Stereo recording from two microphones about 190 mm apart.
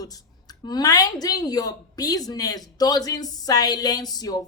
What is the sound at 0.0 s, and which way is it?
A woman's voice, 20° left (ahead or behind).